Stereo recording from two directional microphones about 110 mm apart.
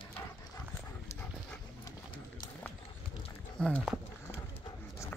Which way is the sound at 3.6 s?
10° left (ahead or behind).